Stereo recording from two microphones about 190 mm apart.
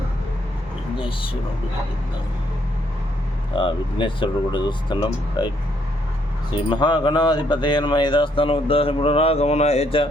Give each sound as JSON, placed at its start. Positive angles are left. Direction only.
{"t": 0.9, "sound": "speech", "side_deg": 30}
{"t": 3.6, "sound": "speech", "side_deg": 25}
{"t": 6.5, "sound": "speech", "side_deg": 25}